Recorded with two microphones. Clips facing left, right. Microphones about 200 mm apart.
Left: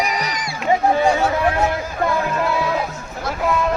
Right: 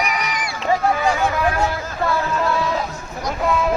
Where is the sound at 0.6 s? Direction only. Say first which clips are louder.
Left 3 dB; 20° left (ahead or behind).